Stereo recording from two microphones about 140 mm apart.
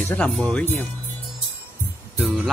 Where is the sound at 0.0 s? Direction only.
10° left (ahead or behind).